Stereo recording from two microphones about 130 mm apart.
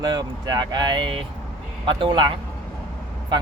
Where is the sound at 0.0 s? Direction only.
35° right (ahead or behind).